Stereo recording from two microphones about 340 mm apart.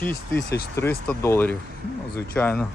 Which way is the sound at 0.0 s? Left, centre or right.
Centre.